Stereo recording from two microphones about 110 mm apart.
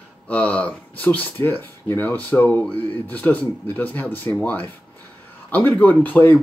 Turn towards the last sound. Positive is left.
turn(degrees=15)  # may be behind; listen again after turning